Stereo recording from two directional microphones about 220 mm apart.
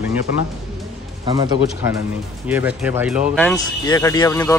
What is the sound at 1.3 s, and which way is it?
Speech, 20° right (ahead or behind).